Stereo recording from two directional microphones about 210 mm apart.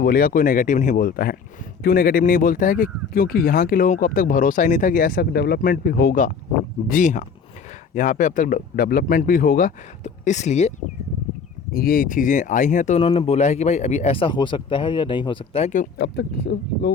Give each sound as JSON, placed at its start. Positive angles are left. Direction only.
{"t": 0.0, "sound": "speech", "side_deg": 45}
{"t": 11.7, "sound": "speech", "side_deg": 45}